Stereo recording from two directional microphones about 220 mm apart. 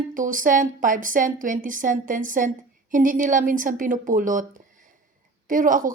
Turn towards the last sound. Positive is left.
turn(degrees=-40)  # may be behind; listen again after turning